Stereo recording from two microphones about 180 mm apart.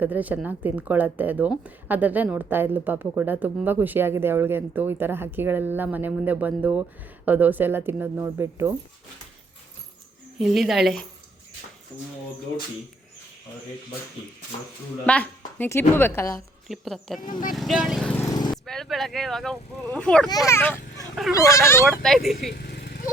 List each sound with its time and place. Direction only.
0.0 s a woman's voice: 10° right (ahead or behind)
10.3 s speech: centre (ahead or behind)
15.0 s a woman's voice: 10° left (ahead or behind)
16.6 s speech: centre (ahead or behind)
17.2 s speech: 50° left (ahead or behind)
17.5 s speech: centre (ahead or behind)
18.3 s vehicle: 25° left (ahead or behind)
18.5 s speech: centre (ahead or behind)
20.3 s a woman's voice: 15° left (ahead or behind)
21.8 s speech: centre (ahead or behind)
22.4 s vehicle: 60° left (ahead or behind)